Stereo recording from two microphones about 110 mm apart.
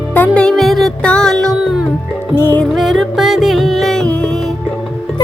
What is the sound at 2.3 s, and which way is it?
Music, 20° left (ahead or behind).